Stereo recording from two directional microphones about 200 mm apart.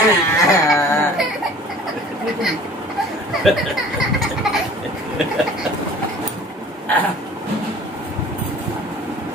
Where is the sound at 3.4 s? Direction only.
Centre (ahead or behind).